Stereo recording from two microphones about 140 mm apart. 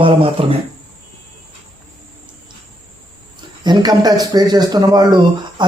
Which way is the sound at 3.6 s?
30° right (ahead or behind).